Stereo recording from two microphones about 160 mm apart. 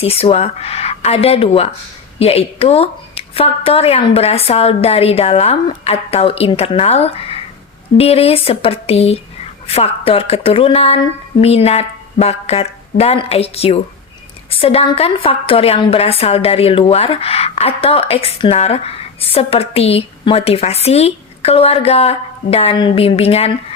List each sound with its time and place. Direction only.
0.0 s a woman's voice: 35° left (ahead or behind)